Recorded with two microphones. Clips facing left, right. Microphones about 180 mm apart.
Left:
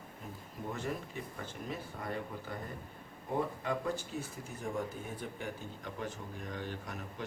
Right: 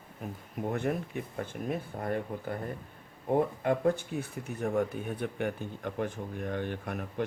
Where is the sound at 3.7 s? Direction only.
60° right (ahead or behind).